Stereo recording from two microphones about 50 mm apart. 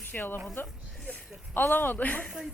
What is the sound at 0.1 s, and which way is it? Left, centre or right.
Speech, left.